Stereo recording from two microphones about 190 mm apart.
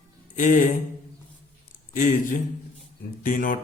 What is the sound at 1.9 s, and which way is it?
A man's voice, 45° left (ahead or behind).